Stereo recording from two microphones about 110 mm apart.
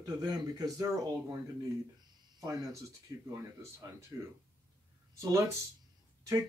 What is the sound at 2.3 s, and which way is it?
Speech, 35° right (ahead or behind).